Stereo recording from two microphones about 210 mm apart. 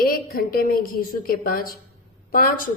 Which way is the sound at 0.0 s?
45° left (ahead or behind).